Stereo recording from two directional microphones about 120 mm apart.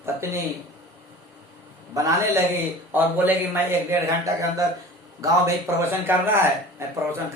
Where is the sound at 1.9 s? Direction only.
25° right (ahead or behind).